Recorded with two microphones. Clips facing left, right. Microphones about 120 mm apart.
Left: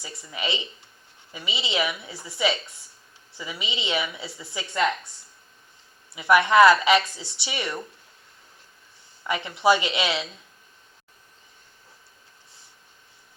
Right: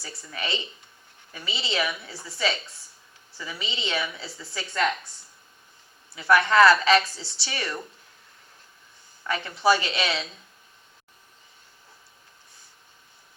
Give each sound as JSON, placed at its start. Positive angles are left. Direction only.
{"t": 0.0, "sound": "a woman's voice", "side_deg": 20}
{"t": 6.1, "sound": "a woman's voice", "side_deg": 15}
{"t": 9.2, "sound": "a woman's voice", "side_deg": 20}